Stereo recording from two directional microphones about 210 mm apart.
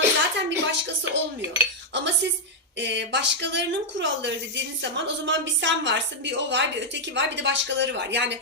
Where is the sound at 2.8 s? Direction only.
55° right (ahead or behind).